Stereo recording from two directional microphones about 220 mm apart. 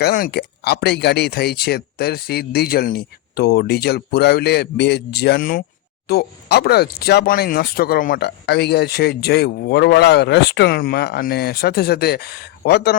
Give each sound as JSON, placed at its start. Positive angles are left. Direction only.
{"t": 0.0, "sound": "speech", "side_deg": 45}